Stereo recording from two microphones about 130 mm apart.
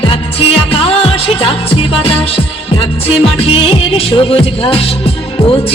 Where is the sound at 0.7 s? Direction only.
45° left (ahead or behind).